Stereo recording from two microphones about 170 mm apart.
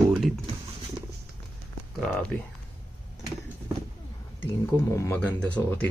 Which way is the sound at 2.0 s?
5° left (ahead or behind).